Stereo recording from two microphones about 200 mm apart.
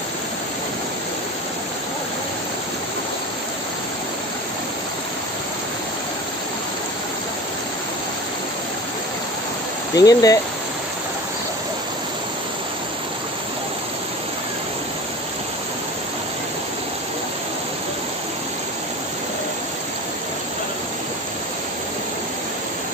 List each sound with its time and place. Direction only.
9.9 s speech: 20° left (ahead or behind)